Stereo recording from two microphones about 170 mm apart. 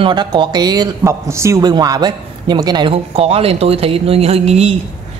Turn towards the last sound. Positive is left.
turn(degrees=-40)  # may be behind; listen again after turning